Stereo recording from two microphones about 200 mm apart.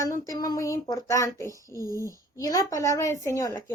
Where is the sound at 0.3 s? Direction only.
20° left (ahead or behind).